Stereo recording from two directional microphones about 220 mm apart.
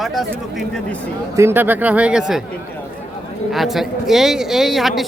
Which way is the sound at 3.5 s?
Centre (ahead or behind).